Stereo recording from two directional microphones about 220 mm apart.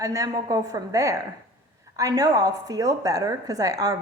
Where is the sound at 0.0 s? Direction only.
15° right (ahead or behind).